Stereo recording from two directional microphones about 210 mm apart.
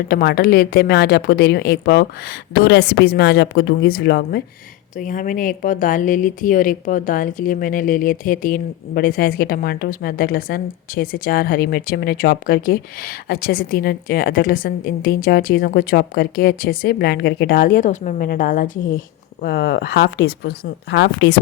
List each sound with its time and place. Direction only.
0.1 s speech: 50° left (ahead or behind)